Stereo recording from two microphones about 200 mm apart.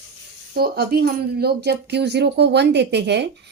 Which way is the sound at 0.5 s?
50° right (ahead or behind).